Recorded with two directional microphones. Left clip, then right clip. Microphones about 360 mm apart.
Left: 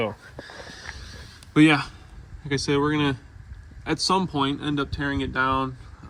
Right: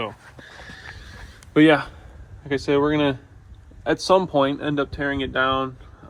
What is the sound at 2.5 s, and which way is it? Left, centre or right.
Speech, centre.